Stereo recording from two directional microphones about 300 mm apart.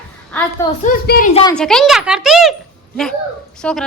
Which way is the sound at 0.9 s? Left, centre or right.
Left.